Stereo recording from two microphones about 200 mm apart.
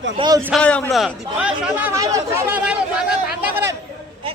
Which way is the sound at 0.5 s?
5° left (ahead or behind).